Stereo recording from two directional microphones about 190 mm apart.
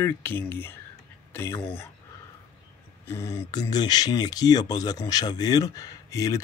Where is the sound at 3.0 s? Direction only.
15° left (ahead or behind).